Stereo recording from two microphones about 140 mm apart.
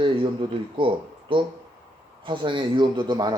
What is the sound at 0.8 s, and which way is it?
Speech, 40° right (ahead or behind).